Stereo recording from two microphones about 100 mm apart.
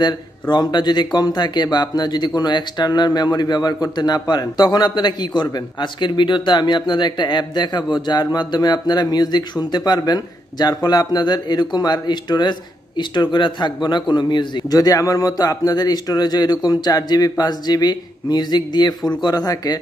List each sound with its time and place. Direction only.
0.0 s speech: 45° left (ahead or behind)